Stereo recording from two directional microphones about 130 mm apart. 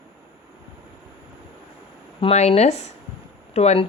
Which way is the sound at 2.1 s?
50° left (ahead or behind).